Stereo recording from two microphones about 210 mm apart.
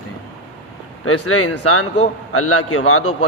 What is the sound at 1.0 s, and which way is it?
A man's voice, 90° left.